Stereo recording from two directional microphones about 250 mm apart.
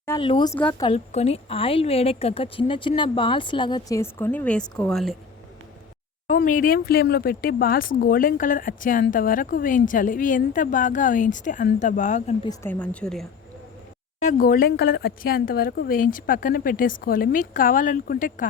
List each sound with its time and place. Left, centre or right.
0.0 s a sound: centre
0.3 s speech: centre
0.9 s a woman's voice: left; by 5.1 s centre
6.2 s speech: left
12.5 s a woman's voice: centre
14.3 s speech: left